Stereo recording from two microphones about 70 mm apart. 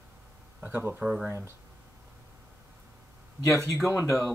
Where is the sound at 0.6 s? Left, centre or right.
Right.